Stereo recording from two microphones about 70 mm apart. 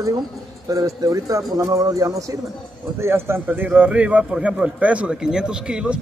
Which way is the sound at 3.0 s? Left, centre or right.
Right.